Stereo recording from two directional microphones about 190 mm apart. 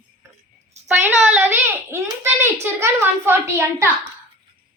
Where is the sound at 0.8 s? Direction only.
5° right (ahead or behind).